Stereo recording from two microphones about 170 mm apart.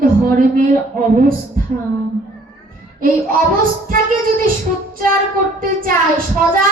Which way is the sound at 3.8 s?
55° right (ahead or behind).